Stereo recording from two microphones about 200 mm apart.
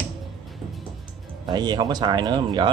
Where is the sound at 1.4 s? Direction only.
20° right (ahead or behind).